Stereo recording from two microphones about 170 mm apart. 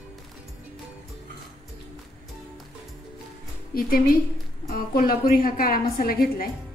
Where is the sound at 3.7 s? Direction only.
60° left (ahead or behind).